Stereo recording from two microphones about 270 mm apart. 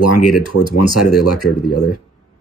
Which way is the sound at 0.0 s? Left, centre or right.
Left.